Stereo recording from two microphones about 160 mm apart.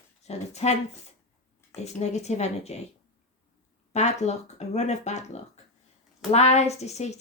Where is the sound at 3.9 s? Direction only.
45° left (ahead or behind).